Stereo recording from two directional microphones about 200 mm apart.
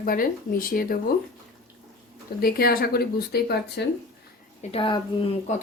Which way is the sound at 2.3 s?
50° left (ahead or behind).